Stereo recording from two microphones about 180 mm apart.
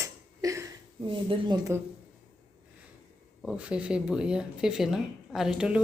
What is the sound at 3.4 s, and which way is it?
Speech, 5° right (ahead or behind).